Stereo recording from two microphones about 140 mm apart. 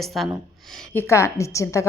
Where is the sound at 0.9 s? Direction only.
20° left (ahead or behind).